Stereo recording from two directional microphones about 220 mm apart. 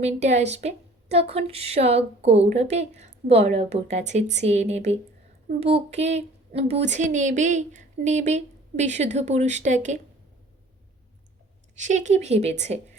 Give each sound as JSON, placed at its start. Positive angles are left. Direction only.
{"t": 0.0, "sound": "a woman's voice", "side_deg": -30}
{"t": 11.8, "sound": "a woman's voice", "side_deg": -35}